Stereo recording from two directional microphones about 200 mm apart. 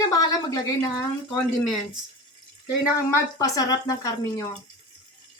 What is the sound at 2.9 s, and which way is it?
A woman's voice, 15° left (ahead or behind).